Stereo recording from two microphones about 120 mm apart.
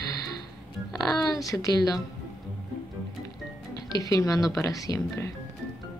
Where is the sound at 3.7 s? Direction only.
30° left (ahead or behind).